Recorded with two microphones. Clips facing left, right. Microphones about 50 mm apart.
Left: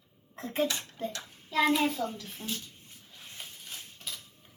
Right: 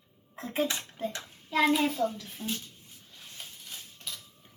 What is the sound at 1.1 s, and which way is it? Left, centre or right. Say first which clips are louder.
Speech: right 3 dB; right.